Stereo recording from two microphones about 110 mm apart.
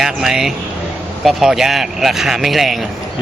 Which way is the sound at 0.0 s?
5° right (ahead or behind).